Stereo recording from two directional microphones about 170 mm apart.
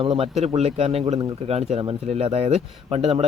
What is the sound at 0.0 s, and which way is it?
Speech, 30° right (ahead or behind).